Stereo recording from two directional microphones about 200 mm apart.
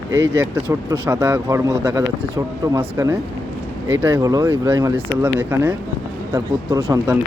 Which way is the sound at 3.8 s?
10° right (ahead or behind).